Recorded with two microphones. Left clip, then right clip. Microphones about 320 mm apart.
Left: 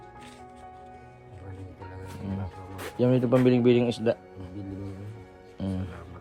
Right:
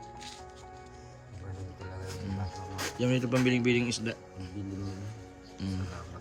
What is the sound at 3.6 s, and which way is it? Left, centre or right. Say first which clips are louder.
Speech: left 6 dB; centre.